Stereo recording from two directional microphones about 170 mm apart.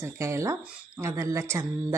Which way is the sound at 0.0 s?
15° right (ahead or behind).